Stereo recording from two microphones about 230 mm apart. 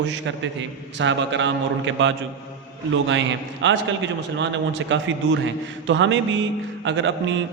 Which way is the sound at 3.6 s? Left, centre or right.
Right.